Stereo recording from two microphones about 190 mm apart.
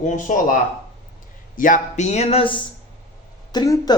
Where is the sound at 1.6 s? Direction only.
40° left (ahead or behind).